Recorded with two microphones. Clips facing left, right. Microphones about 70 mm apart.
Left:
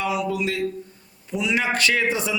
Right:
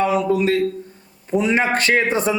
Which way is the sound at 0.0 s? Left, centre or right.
Right.